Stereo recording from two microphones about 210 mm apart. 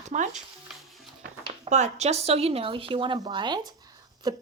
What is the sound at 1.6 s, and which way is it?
A woman's voice, 35° right (ahead or behind).